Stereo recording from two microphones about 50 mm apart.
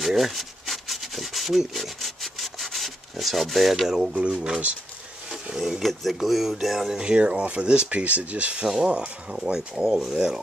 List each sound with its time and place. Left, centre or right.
0.0 s rub: centre
4.2 s speech: centre
5.3 s speech: centre
7.0 s speech: centre